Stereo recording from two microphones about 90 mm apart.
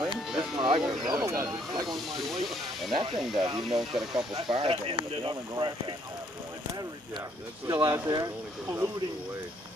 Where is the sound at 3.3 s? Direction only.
50° right (ahead or behind).